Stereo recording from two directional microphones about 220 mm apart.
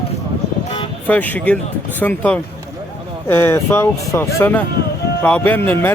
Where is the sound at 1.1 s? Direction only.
5° left (ahead or behind).